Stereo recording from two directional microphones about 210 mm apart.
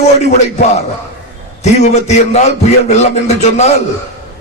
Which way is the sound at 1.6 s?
30° left (ahead or behind).